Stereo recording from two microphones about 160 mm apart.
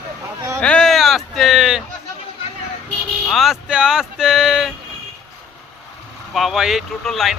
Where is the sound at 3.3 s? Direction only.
Centre (ahead or behind).